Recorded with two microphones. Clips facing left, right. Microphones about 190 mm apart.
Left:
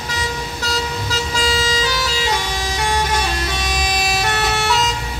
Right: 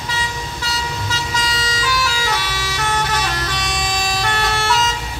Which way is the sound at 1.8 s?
20° left (ahead or behind).